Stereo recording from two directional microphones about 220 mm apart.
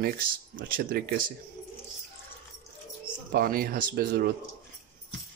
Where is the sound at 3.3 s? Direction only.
40° right (ahead or behind).